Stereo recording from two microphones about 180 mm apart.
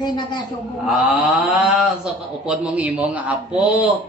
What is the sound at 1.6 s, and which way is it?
Speech, 5° right (ahead or behind).